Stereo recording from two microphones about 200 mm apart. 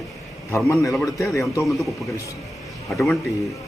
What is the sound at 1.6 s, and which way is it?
Speech, centre (ahead or behind).